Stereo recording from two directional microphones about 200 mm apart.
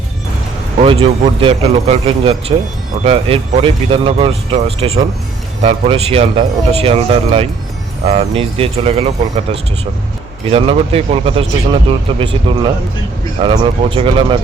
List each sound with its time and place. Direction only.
0.8 s speech: 30° right (ahead or behind)